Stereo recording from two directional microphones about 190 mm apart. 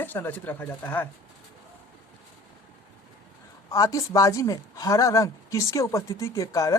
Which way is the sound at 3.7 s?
15° left (ahead or behind).